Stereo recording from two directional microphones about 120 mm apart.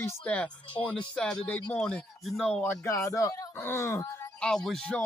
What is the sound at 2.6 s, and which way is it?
Speech, 20° left (ahead or behind).